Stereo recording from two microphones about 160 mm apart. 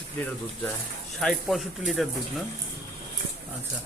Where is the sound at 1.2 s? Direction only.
Centre (ahead or behind).